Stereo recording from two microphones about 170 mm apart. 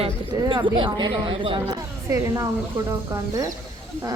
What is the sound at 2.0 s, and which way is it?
Speech, 15° right (ahead or behind).